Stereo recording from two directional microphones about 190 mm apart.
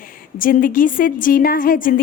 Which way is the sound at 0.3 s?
45° left (ahead or behind).